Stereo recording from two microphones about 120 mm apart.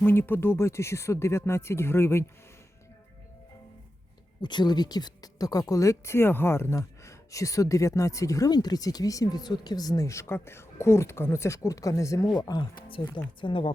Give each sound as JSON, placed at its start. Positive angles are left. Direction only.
{"t": 0.0, "sound": "speech", "side_deg": 15}
{"t": 4.4, "sound": "speech", "side_deg": 40}